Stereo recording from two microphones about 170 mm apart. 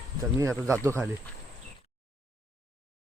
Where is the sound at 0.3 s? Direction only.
15° right (ahead or behind).